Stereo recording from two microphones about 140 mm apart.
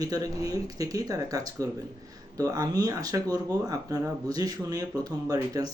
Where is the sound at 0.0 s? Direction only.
25° right (ahead or behind).